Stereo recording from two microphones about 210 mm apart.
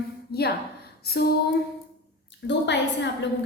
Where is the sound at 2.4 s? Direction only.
55° left (ahead or behind).